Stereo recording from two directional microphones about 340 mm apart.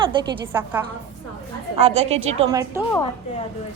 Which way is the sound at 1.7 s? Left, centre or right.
Centre.